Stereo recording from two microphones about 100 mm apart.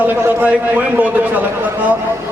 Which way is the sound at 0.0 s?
20° right (ahead or behind).